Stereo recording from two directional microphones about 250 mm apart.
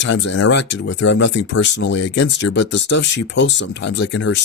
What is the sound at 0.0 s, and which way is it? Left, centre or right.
Speech, left.